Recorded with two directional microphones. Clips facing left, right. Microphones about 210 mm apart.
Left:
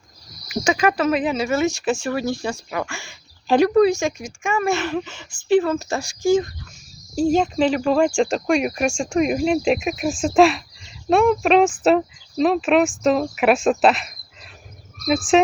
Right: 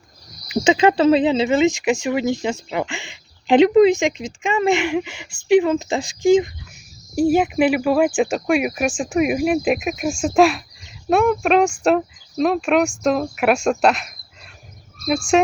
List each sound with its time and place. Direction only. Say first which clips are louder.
0.5 s speech: right 4 dB; 20° right (ahead or behind); by 15.4 s centre (ahead or behind)